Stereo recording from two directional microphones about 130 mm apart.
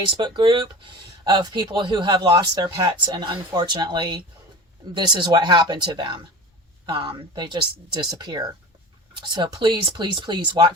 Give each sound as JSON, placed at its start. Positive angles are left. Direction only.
{"t": 0.2, "sound": "speech", "side_deg": -35}